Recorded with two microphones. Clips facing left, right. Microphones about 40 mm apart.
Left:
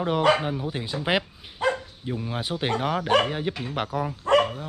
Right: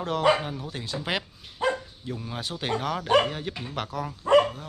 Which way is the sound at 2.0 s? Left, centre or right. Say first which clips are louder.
Left 5 dB; centre.